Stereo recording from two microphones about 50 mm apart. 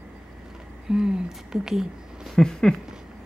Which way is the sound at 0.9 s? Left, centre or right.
Centre.